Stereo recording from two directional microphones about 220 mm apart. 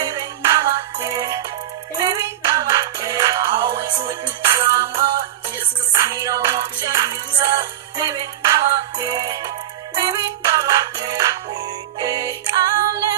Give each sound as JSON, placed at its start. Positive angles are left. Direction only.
{"t": 0.0, "sound": "music", "side_deg": -20}